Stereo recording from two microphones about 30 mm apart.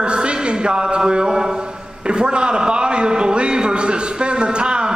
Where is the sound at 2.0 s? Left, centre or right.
Right.